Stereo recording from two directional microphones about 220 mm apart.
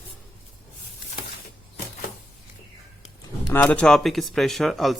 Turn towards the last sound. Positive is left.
turn(degrees=0)  # may be behind; listen again after turning